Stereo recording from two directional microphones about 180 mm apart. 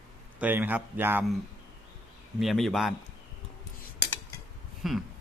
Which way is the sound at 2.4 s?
Centre (ahead or behind).